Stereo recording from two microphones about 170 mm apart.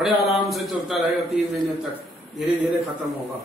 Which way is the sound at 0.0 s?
Centre (ahead or behind).